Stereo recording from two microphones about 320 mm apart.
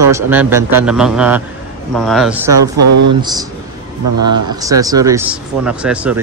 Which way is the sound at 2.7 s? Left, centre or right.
Right.